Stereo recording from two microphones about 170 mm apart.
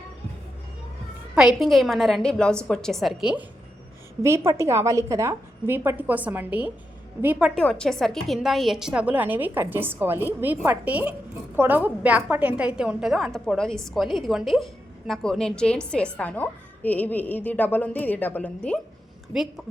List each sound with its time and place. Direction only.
1.5 s a woman's voice: centre (ahead or behind)
4.2 s a woman's voice: 15° right (ahead or behind)
7.5 s a woman's voice: 5° left (ahead or behind)